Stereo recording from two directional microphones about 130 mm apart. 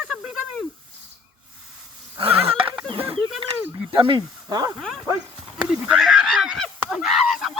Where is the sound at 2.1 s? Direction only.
45° right (ahead or behind).